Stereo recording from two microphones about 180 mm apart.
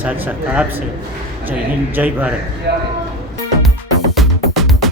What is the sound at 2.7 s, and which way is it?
Speech, 65° right (ahead or behind).